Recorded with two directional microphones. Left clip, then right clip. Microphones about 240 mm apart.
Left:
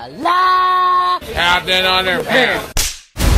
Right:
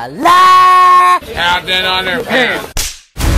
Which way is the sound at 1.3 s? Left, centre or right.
Left.